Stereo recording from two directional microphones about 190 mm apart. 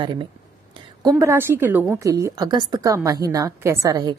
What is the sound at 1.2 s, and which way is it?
Speech, 10° right (ahead or behind).